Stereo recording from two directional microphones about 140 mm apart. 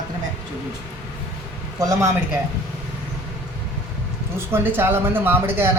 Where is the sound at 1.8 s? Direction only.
25° right (ahead or behind).